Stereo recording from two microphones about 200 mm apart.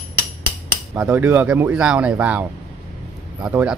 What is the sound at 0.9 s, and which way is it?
Speech, 10° right (ahead or behind).